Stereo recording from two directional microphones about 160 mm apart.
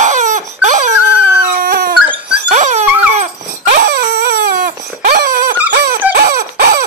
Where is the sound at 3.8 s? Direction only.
75° right (ahead or behind).